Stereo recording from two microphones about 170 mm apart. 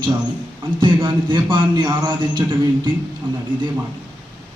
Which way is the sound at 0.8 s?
30° right (ahead or behind).